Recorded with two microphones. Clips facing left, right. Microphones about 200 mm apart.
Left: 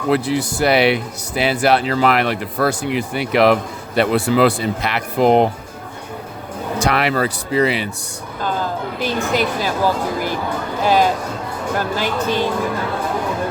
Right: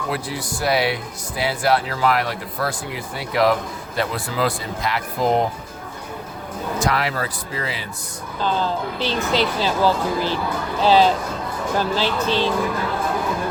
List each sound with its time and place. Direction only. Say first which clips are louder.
0.1 s speech: left 13 dB; 70° left (ahead or behind)
6.8 s speech: left 6 dB; 70° left (ahead or behind)
9.0 s speech: left 3 dB; 10° left (ahead or behind)